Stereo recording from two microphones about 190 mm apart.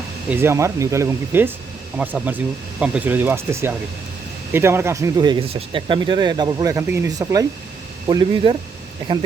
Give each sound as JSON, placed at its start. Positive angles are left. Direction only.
{"t": 0.3, "sound": "speech", "side_deg": -10}